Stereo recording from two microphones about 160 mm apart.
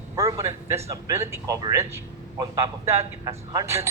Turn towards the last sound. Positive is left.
turn(degrees=-20)  # may be behind; listen again after turning